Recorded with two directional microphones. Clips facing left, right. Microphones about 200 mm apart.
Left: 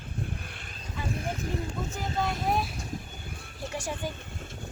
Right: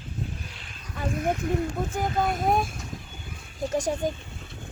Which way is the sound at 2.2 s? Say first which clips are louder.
Right 4 dB; 50° right (ahead or behind).